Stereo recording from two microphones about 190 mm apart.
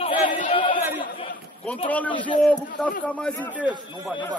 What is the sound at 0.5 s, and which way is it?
Chatter, 25° left (ahead or behind).